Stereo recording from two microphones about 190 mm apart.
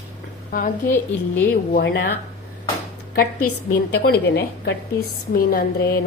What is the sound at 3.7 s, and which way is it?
A woman's voice, 55° left (ahead or behind).